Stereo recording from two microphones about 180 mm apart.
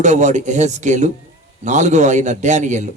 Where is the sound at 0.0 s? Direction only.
40° right (ahead or behind).